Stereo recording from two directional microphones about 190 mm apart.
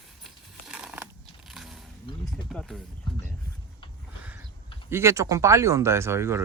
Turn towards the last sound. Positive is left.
turn(degrees=-15)  # may be behind; listen again after turning